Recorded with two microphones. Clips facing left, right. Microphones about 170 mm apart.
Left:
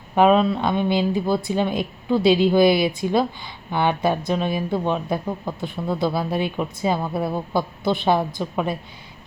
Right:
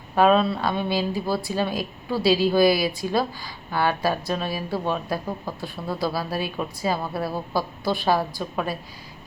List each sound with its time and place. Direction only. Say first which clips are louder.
0.2 s a woman's voice: left 2 dB; 15° left (ahead or behind)